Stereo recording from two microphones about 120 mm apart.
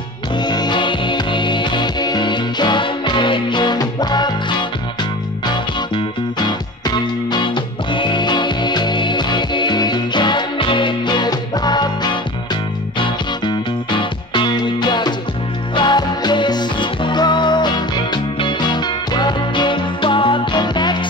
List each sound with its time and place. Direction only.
0.4 s music: 35° left (ahead or behind)